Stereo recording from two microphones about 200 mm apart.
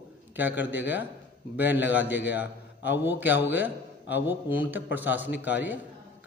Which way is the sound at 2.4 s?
60° left (ahead or behind).